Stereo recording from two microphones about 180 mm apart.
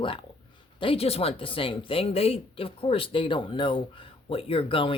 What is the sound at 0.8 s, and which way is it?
Speech, 30° left (ahead or behind).